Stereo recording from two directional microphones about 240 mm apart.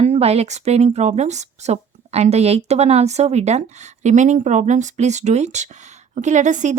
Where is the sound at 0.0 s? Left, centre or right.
Right.